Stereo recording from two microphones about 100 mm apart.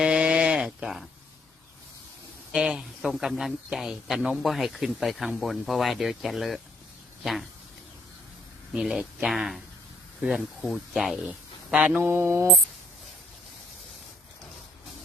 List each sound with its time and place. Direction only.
0.0 s sheep: 10° right (ahead or behind)
2.5 s speech: 5° right (ahead or behind)
8.7 s speech: 5° right (ahead or behind); by 12.5 s 25° right (ahead or behind)